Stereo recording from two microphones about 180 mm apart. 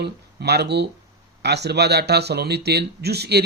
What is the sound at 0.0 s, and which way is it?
Speech, 65° right (ahead or behind).